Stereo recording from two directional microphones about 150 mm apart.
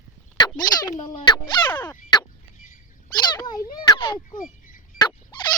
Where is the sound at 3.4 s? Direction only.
25° left (ahead or behind).